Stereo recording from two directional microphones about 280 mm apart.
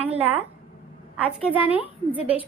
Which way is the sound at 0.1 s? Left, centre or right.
Right.